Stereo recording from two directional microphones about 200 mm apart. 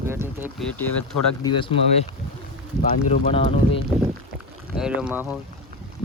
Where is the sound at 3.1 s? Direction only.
30° left (ahead or behind).